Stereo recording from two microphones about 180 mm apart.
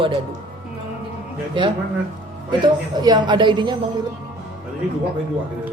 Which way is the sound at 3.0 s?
25° right (ahead or behind).